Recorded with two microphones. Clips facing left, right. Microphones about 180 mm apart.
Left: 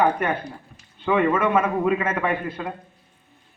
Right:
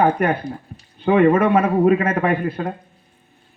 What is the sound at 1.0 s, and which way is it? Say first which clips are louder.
Speech: right 6 dB; 50° right (ahead or behind).